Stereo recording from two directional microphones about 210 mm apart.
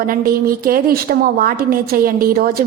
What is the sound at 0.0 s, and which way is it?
A woman's voice, 45° right (ahead or behind).